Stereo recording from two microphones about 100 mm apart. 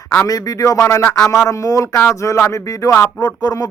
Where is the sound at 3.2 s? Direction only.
40° left (ahead or behind).